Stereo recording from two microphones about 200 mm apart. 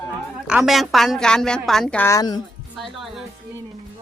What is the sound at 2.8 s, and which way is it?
Speech, centre (ahead or behind).